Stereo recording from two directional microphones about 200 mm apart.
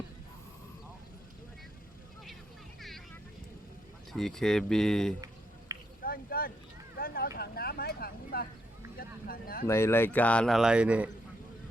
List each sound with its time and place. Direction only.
4.1 s a man's voice: centre (ahead or behind)
6.0 s speech: 50° left (ahead or behind)
9.6 s a man's voice: 15° left (ahead or behind); by 11.1 s 5° right (ahead or behind)